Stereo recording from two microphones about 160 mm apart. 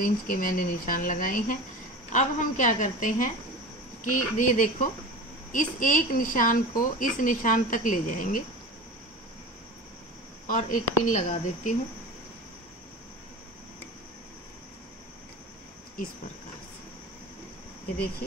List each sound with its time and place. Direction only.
0.0 s a woman's voice: 60° left (ahead or behind)
10.5 s a woman's voice: 50° left (ahead or behind)